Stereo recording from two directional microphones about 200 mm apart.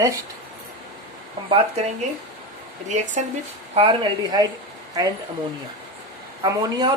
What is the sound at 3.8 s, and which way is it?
Speech, 25° right (ahead or behind).